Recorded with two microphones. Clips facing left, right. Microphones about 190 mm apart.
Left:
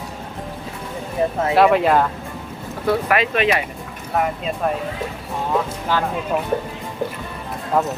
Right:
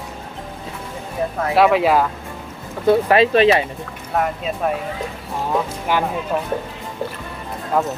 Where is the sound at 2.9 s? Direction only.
30° right (ahead or behind).